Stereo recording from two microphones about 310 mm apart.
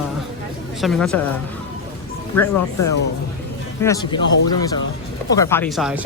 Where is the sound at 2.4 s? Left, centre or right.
Left.